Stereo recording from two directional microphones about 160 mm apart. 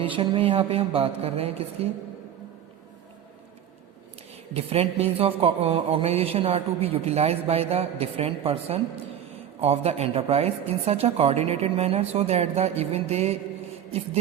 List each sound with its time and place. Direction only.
0.0 s a man's voice: 30° right (ahead or behind)
4.5 s a man's voice: 40° right (ahead or behind)